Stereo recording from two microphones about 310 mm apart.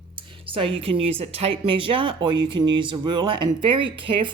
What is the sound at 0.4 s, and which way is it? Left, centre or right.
Speech, centre.